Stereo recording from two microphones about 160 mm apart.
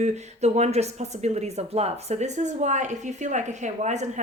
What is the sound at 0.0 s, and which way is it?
A woman's voice, 45° right (ahead or behind).